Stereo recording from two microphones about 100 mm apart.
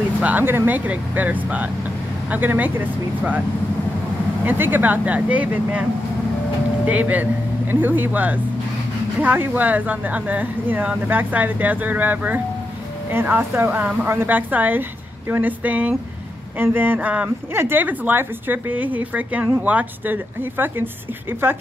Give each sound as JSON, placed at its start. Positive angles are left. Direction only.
{"t": 0.2, "sound": "speech", "side_deg": -20}
{"t": 4.5, "sound": "speech", "side_deg": -20}
{"t": 6.9, "sound": "a woman's voice", "side_deg": -15}